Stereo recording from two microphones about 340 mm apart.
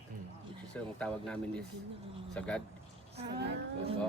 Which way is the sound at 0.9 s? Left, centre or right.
Centre.